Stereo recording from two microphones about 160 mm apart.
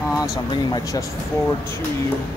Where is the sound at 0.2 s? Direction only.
25° left (ahead or behind).